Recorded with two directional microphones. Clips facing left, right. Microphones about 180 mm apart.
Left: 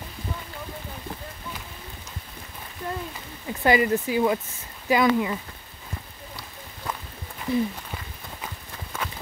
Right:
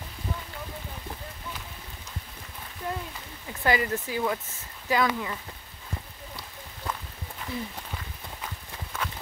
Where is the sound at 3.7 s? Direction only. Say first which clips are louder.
Left 5 dB; 15° left (ahead or behind).